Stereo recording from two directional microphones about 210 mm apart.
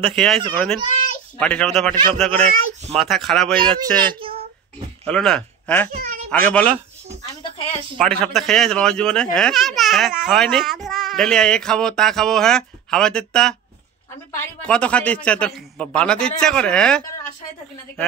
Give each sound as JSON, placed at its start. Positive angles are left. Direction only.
{"t": 0.1, "sound": "a child's voice", "side_deg": 0}
{"t": 3.6, "sound": "a child's voice", "side_deg": -20}
{"t": 5.0, "sound": "a child's voice", "side_deg": 5}
{"t": 8.0, "sound": "a child's voice", "side_deg": 0}